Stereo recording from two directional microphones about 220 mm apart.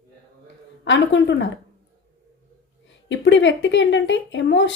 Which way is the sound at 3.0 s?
55° left (ahead or behind).